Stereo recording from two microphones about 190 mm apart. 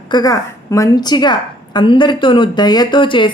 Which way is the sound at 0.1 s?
20° left (ahead or behind).